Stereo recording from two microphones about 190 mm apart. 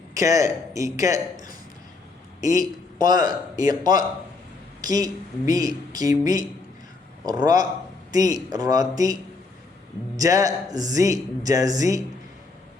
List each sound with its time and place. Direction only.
0.1 s speech: 15° right (ahead or behind)
10.2 s speech: 20° right (ahead or behind)